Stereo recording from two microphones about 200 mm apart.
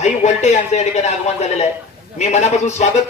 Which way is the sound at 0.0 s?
35° left (ahead or behind).